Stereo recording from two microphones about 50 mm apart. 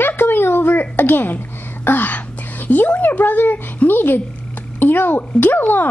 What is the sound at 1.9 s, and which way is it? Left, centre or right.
Speech, left.